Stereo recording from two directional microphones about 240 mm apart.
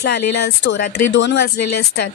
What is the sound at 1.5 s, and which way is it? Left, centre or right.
Speech, left.